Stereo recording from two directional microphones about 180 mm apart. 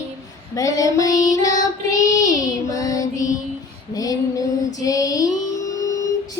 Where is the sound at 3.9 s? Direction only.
20° left (ahead or behind).